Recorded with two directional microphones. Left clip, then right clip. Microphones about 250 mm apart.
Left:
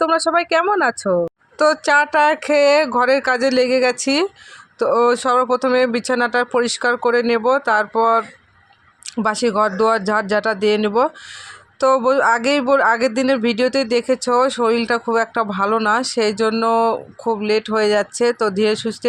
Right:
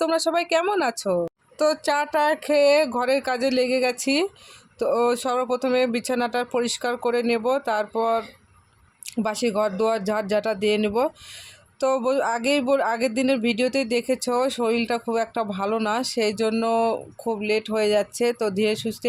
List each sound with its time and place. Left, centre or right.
0.0 s speech: centre